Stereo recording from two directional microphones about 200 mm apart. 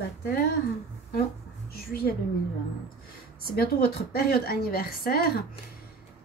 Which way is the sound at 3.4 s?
50° left (ahead or behind).